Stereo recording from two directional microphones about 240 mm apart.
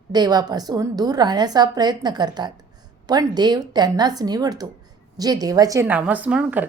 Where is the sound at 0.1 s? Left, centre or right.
Centre.